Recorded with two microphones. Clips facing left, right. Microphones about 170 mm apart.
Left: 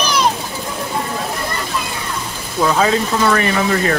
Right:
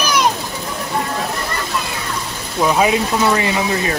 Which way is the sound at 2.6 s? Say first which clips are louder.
Even; 15° right (ahead or behind).